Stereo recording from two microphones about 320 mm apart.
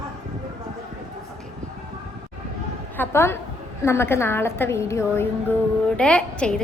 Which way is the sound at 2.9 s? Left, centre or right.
Centre.